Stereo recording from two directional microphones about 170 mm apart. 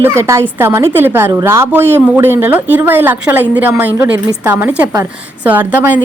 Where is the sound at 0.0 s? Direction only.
15° right (ahead or behind).